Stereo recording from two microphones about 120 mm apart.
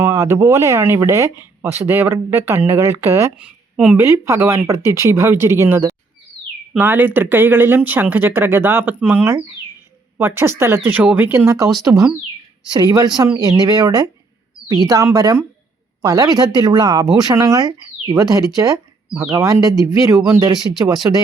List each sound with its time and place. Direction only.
0.0 s speech: 25° right (ahead or behind)
3.8 s speech: 10° right (ahead or behind)
4.0 s speech: 25° right (ahead or behind)